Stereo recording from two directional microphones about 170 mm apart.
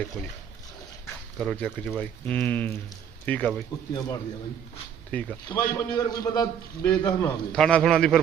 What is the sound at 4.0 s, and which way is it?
A man's voice, 15° left (ahead or behind).